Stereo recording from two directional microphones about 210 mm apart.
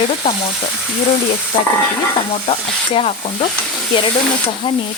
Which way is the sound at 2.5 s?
30° left (ahead or behind).